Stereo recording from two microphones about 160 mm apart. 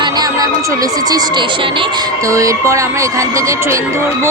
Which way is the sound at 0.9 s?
25° right (ahead or behind).